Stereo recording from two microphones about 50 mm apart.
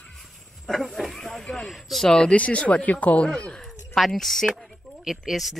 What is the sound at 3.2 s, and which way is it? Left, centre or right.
Speech, centre.